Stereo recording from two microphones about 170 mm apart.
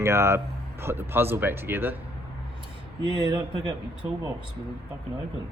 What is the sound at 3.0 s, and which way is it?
Speech, 25° right (ahead or behind).